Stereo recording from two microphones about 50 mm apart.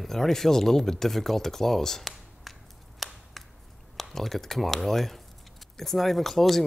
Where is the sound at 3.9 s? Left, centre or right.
Centre.